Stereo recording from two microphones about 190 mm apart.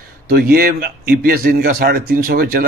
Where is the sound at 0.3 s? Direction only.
50° right (ahead or behind).